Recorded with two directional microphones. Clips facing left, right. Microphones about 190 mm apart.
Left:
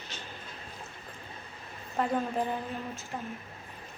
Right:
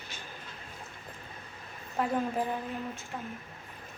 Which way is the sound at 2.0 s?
5° right (ahead or behind).